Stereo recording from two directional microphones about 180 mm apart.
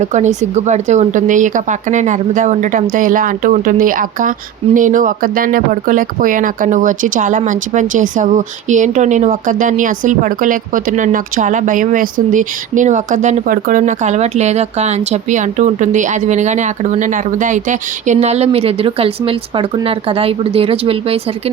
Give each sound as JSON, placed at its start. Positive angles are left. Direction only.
{"t": 0.0, "sound": "a woman's voice", "side_deg": -40}